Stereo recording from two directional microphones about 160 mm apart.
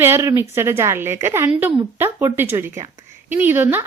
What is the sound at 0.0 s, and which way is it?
A woman's voice, 15° right (ahead or behind).